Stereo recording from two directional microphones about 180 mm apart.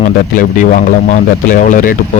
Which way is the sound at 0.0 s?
45° left (ahead or behind).